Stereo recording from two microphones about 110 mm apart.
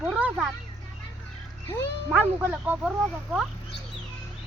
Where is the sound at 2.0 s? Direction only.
15° right (ahead or behind).